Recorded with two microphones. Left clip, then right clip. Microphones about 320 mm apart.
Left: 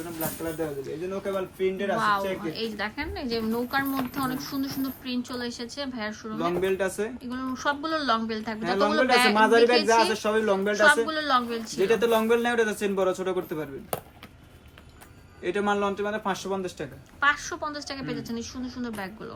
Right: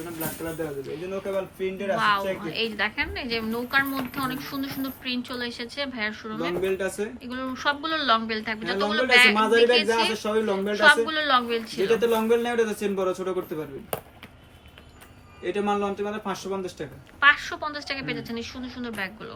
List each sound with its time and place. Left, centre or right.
0.2 s a woman's voice: centre
15.7 s a woman's voice: centre